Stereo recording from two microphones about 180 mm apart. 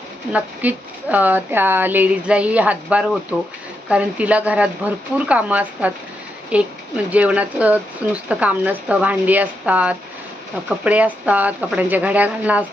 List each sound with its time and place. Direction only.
0.3 s speech: 10° right (ahead or behind)